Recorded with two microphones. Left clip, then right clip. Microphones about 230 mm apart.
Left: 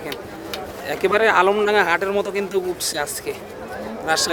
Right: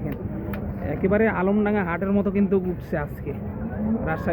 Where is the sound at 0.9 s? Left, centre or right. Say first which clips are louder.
Left 5 dB; left.